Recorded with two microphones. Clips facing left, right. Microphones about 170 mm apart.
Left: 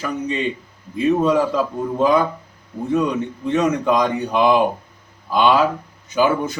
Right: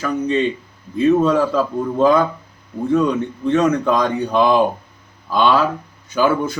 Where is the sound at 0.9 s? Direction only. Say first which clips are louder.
Right 2 dB; 15° left (ahead or behind).